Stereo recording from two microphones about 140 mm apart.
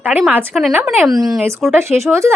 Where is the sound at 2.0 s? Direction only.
20° right (ahead or behind).